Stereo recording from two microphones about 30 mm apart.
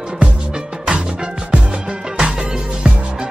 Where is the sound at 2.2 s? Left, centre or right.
Right.